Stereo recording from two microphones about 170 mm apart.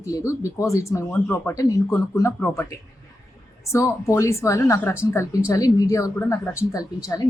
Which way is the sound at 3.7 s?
20° left (ahead or behind).